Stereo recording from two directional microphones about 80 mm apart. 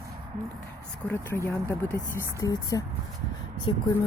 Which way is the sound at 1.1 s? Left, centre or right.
Left.